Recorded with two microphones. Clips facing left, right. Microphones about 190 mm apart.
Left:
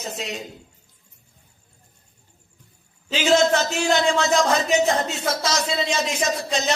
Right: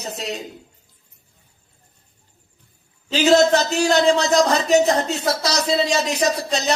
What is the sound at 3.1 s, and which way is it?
A man's voice, 40° right (ahead or behind).